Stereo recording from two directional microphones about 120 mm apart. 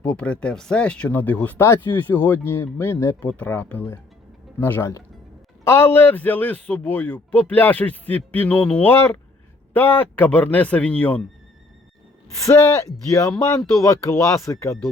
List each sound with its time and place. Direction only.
0.0 s speech: 10° left (ahead or behind)
13.1 s speech: 30° left (ahead or behind)